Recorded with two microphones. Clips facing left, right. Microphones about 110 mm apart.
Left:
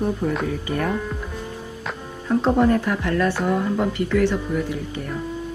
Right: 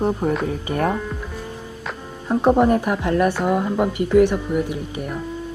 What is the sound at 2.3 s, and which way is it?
A woman's voice, 20° right (ahead or behind).